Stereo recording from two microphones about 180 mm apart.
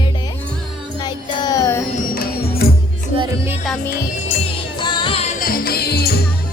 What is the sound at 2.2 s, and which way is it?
Music, 55° left (ahead or behind).